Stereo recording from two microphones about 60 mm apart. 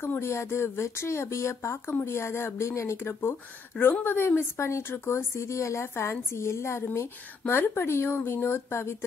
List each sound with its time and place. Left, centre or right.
0.0 s speech: left
3.0 s speech: left